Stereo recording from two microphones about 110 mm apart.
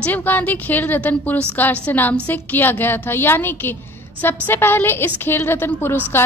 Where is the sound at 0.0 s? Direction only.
15° left (ahead or behind).